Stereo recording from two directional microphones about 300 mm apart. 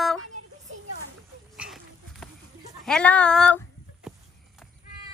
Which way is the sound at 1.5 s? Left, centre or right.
Centre.